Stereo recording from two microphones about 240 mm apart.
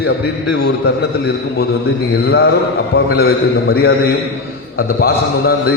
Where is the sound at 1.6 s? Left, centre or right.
Left.